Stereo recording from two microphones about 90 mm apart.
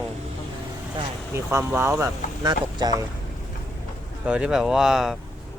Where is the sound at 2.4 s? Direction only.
50° right (ahead or behind).